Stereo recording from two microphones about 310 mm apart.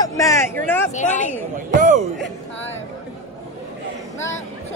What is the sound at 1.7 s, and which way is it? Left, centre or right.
Speech, right.